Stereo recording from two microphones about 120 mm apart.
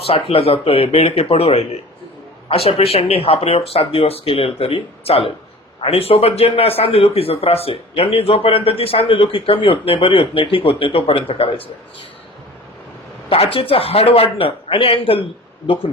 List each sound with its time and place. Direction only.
0.1 s a man's voice: 55° left (ahead or behind)
13.3 s a man's voice: 50° left (ahead or behind)